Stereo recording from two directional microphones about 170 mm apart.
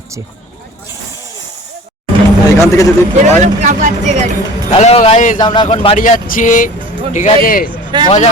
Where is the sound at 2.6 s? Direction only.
20° left (ahead or behind).